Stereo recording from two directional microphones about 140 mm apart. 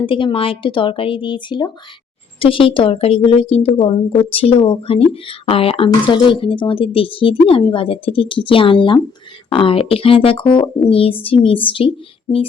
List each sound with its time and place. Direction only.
0.0 s a woman's voice: 35° left (ahead or behind)